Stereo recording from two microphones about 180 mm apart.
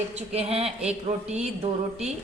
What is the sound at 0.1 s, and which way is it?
A woman's voice, 35° right (ahead or behind).